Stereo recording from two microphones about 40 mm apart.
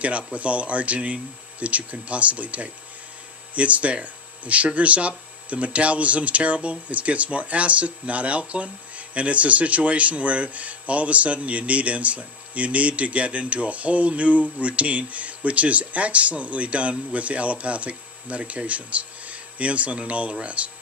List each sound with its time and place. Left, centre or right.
0.0 s speech: right